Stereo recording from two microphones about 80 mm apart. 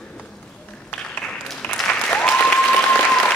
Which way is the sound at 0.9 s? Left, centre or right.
Centre.